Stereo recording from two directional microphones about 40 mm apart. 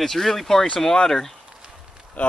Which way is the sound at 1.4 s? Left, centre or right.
Right.